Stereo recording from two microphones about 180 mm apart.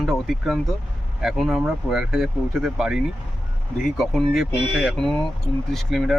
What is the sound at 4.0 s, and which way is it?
Speech, centre (ahead or behind).